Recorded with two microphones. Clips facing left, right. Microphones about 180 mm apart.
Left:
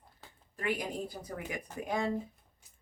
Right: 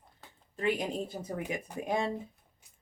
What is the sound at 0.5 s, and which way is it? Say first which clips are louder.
Speech: right 4 dB; 25° right (ahead or behind).